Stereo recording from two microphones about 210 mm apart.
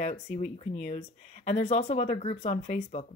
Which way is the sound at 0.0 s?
40° left (ahead or behind).